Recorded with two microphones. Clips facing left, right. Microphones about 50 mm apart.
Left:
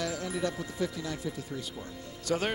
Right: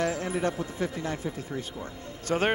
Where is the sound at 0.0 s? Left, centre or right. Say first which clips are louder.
Right 5 dB; right.